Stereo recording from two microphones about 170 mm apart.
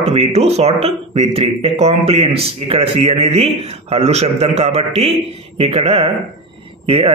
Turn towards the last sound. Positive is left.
turn(degrees=-35)  # may be behind; listen again after turning